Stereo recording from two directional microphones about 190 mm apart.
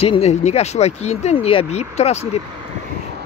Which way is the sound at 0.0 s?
30° left (ahead or behind).